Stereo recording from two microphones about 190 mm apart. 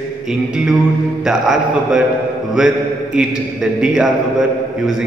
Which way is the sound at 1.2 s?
Centre (ahead or behind).